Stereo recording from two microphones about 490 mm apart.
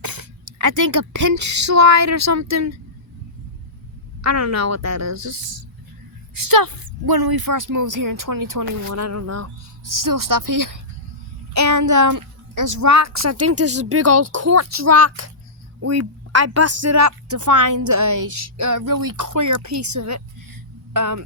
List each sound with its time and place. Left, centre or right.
0.0 s speech: right
4.2 s speech: right
6.3 s speech: right